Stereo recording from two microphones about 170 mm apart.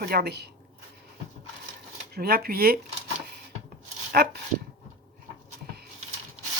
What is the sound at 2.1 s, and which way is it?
Speech, 65° right (ahead or behind).